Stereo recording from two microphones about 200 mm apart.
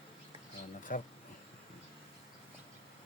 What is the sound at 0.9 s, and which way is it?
Speech, 45° left (ahead or behind).